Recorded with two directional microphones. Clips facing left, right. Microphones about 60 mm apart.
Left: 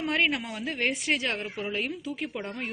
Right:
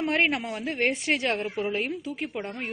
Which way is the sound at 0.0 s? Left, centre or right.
Right.